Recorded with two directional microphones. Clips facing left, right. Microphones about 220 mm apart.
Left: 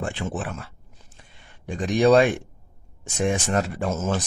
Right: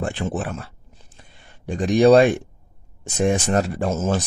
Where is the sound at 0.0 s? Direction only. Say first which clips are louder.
Right 4 dB; 40° right (ahead or behind).